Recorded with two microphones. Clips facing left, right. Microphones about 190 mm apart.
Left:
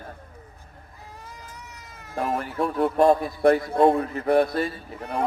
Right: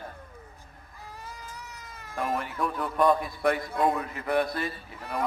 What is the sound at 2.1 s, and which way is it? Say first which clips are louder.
A man's voice: left 4 dB; 35° left (ahead or behind).